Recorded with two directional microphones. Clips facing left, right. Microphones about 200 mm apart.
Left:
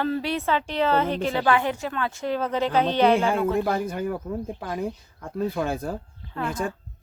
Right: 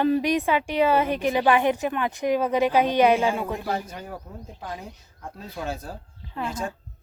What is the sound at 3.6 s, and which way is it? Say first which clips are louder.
Speech: left 5 dB; 55° left (ahead or behind).